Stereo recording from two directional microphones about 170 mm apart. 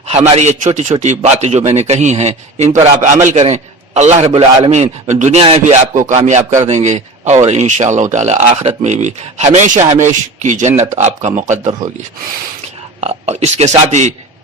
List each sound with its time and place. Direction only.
0.1 s a man's voice: 40° right (ahead or behind)
13.0 s a man's voice: 40° right (ahead or behind)